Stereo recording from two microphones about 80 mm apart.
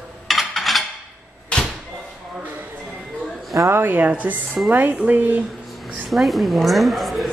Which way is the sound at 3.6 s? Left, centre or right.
Right.